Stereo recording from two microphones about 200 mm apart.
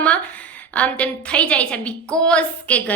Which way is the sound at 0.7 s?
5° left (ahead or behind).